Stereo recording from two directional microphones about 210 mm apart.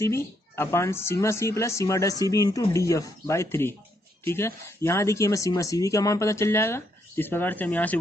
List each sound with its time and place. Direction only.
0.0 s speech: 15° left (ahead or behind)